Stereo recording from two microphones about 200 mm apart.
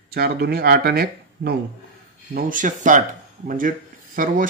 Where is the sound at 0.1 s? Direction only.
50° right (ahead or behind).